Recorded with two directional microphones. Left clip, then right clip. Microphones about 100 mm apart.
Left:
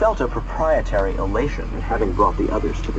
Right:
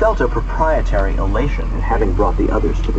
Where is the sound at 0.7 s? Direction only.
15° left (ahead or behind).